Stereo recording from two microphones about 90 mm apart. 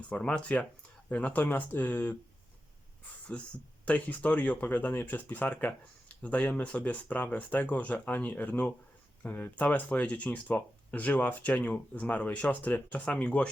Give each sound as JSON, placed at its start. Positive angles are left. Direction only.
{"t": 0.1, "sound": "speech", "side_deg": 15}
{"t": 3.3, "sound": "speech", "side_deg": 15}